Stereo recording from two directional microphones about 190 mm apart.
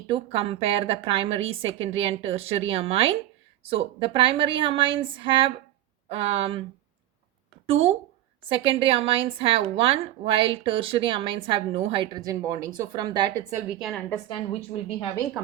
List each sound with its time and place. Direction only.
0.1 s a woman's voice: 30° right (ahead or behind)
7.7 s a woman's voice: 30° right (ahead or behind)
13.6 s a woman's voice: 5° right (ahead or behind)
14.1 s a woman's voice: 25° left (ahead or behind)